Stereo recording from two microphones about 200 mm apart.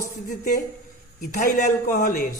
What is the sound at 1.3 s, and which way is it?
Speech, 40° left (ahead or behind).